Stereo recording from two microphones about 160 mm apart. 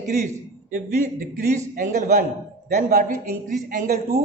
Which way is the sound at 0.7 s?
55° right (ahead or behind).